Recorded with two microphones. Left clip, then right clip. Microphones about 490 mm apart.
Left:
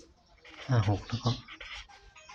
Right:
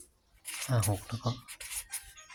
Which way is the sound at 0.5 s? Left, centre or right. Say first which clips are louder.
Left 1 dB; right.